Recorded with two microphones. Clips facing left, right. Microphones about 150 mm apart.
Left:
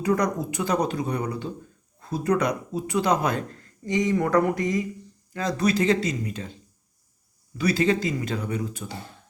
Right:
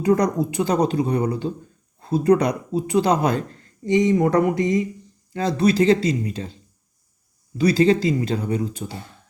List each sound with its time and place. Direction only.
0.0 s speech: 30° right (ahead or behind)
7.6 s speech: 30° right (ahead or behind)